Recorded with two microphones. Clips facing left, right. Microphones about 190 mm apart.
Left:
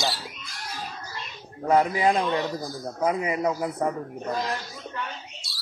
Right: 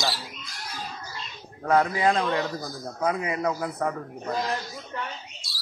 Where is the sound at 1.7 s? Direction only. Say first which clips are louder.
Left 1 dB; 15° left (ahead or behind).